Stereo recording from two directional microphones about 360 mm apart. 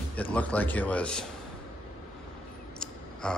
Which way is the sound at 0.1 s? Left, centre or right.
Centre.